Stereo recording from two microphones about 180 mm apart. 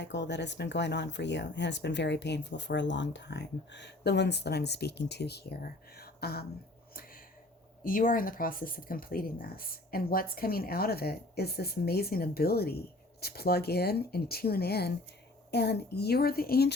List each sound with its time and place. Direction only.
0.0 s speech: 75° left (ahead or behind); by 6.4 s 60° left (ahead or behind)
7.9 s speech: 50° left (ahead or behind)